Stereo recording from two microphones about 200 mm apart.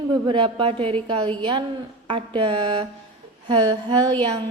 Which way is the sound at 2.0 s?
25° right (ahead or behind).